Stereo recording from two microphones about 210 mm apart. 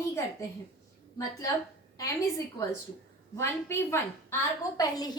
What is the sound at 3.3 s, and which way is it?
A woman's voice, 10° left (ahead or behind).